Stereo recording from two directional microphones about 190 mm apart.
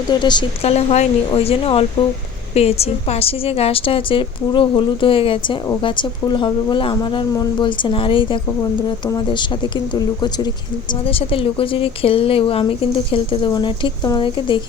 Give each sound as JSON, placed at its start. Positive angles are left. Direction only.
{"t": 0.1, "sound": "speech", "side_deg": 25}